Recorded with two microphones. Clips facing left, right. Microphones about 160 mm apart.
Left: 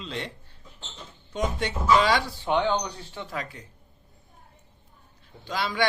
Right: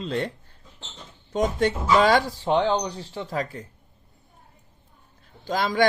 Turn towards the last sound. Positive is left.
turn(degrees=-45)  # may be behind; listen again after turning